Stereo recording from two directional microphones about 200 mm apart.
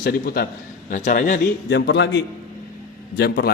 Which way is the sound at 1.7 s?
60° left (ahead or behind).